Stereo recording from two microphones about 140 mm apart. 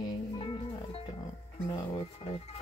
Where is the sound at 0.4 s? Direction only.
40° left (ahead or behind).